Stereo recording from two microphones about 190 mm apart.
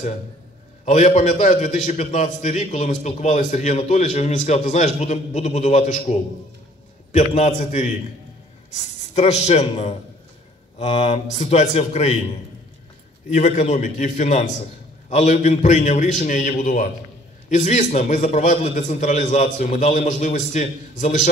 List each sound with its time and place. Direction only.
0.8 s a man's voice: 40° left (ahead or behind)
13.3 s a man's voice: 35° left (ahead or behind)